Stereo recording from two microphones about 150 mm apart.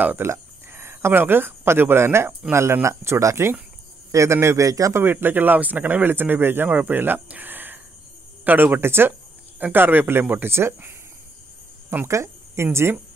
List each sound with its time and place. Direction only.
0.0 s a man's voice: 15° right (ahead or behind)